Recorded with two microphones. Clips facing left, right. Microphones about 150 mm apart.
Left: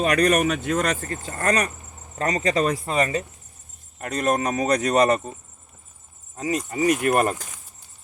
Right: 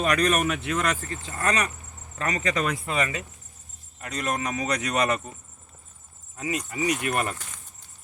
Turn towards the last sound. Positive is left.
turn(degrees=40)  # may be behind; listen again after turning